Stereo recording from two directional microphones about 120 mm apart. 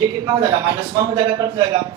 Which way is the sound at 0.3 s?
35° right (ahead or behind).